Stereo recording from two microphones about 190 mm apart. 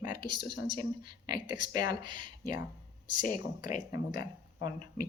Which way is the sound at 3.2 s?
45° left (ahead or behind).